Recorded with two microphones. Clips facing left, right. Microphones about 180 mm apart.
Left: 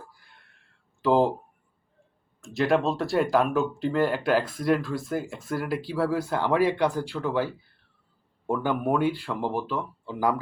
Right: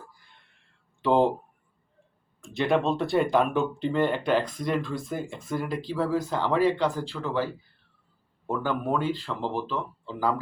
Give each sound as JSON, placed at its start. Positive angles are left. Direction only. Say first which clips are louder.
{"t": 1.0, "sound": "speech", "louder": "even", "side_deg": 0}
{"t": 2.4, "sound": "speech", "louder": "left 1 dB", "side_deg": 0}